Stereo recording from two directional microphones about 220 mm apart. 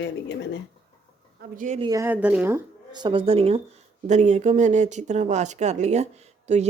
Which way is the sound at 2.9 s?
20° right (ahead or behind).